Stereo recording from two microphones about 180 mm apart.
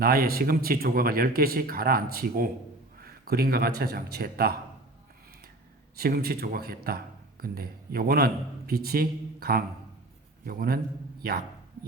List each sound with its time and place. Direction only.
0.0 s a man's voice: 55° right (ahead or behind)
6.0 s speech: 60° right (ahead or behind)